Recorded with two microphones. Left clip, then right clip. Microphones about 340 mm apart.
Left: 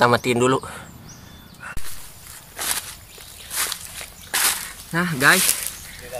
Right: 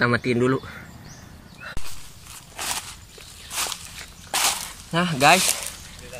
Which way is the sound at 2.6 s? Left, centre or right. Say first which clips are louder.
Left 2 dB; centre.